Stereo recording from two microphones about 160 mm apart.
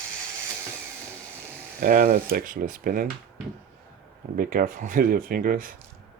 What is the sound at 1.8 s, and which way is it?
Speech, 65° right (ahead or behind).